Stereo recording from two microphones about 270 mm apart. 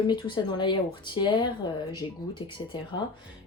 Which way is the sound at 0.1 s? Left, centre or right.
Centre.